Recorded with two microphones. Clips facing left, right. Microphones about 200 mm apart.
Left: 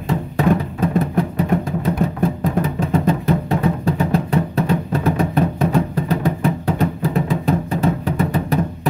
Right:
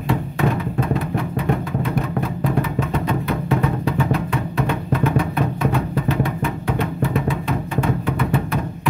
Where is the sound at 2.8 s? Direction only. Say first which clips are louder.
Left 5 dB; 35° left (ahead or behind).